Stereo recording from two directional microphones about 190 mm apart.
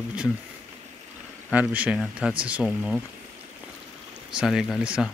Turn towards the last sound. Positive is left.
turn(degrees=-5)  # may be behind; listen again after turning